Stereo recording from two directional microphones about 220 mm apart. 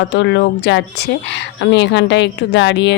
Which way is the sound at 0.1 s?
55° left (ahead or behind).